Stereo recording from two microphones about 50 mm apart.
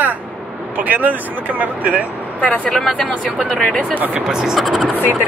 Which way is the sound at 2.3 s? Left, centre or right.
Left.